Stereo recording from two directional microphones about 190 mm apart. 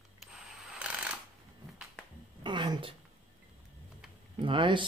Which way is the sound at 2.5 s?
25° right (ahead or behind).